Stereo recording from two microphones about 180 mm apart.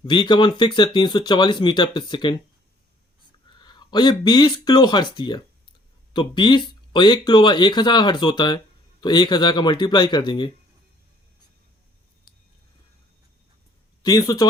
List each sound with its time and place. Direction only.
0.0 s speech: 25° left (ahead or behind)
3.6 s speech: 25° left (ahead or behind)
14.0 s speech: 20° left (ahead or behind)